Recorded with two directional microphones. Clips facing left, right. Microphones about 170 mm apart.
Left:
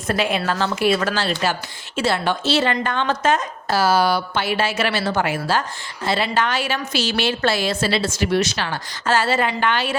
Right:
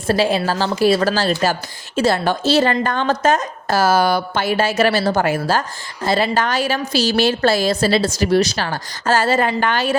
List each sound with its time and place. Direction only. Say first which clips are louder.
0.1 s a woman's voice: right 4 dB; 35° right (ahead or behind)